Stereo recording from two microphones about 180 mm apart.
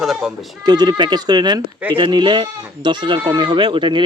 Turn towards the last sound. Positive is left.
turn(degrees=-25)  # may be behind; listen again after turning